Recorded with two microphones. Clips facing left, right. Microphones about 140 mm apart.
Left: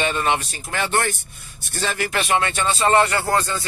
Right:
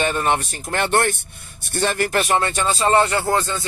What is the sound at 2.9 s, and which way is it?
Speech, 25° right (ahead or behind).